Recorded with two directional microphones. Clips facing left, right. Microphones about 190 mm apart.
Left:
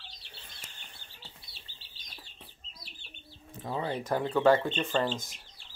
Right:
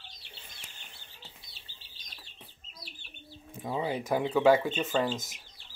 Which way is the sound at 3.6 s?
10° right (ahead or behind).